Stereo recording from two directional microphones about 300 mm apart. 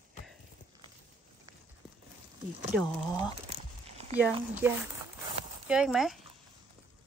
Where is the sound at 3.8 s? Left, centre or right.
Centre.